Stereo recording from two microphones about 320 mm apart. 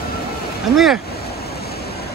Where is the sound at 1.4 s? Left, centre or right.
Left.